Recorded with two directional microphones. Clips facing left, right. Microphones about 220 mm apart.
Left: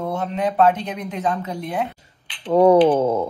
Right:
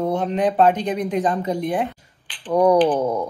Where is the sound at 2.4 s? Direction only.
25° left (ahead or behind).